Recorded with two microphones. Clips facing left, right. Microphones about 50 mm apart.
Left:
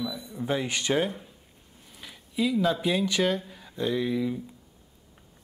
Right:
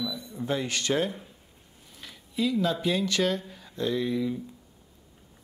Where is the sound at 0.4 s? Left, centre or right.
Centre.